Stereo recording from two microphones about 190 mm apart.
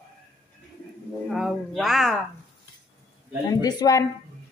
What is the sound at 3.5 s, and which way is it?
Speech, 20° left (ahead or behind).